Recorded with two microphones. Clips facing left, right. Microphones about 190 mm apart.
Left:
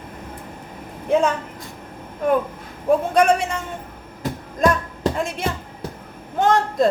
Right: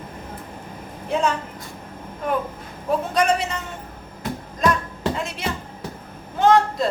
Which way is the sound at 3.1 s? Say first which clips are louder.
Left 4 dB; 50° left (ahead or behind).